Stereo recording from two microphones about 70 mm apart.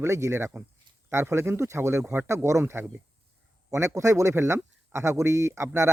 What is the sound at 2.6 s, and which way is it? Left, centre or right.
Speech, right.